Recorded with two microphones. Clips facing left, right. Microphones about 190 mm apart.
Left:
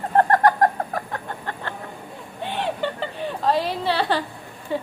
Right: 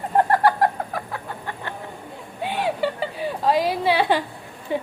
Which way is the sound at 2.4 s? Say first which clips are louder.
Right 2 dB; 10° right (ahead or behind).